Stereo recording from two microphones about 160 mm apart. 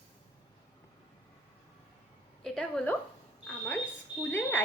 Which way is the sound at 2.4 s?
5° left (ahead or behind).